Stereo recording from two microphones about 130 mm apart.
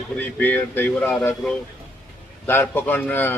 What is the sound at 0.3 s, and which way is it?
Speech, 15° left (ahead or behind).